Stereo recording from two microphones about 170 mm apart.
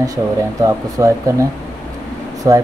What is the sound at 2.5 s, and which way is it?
Speech, 20° right (ahead or behind).